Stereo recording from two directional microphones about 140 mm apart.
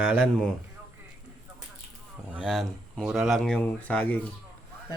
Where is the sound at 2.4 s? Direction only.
5° left (ahead or behind).